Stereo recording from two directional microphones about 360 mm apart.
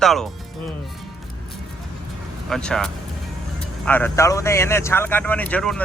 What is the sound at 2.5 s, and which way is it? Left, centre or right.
Speech, centre.